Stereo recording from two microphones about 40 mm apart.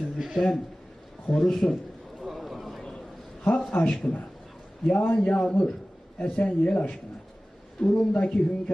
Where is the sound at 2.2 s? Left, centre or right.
Centre.